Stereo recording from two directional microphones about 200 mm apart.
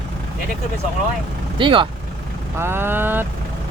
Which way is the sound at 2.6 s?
10° right (ahead or behind).